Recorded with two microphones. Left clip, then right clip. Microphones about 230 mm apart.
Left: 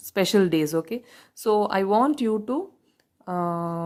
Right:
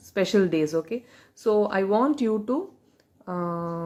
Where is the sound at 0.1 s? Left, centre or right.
Left.